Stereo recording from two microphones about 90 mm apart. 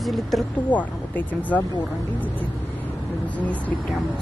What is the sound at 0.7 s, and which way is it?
Speech, 15° left (ahead or behind).